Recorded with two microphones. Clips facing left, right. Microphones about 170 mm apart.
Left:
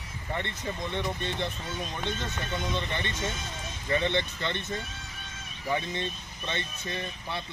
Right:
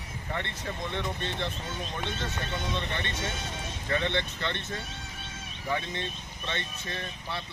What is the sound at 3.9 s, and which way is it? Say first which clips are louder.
Speech: left 2 dB; 10° left (ahead or behind).